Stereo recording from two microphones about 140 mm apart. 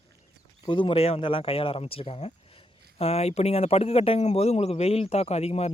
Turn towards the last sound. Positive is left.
turn(degrees=45)  # may be behind; listen again after turning